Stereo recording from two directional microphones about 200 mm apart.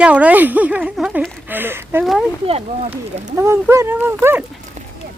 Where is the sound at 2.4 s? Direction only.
30° right (ahead or behind).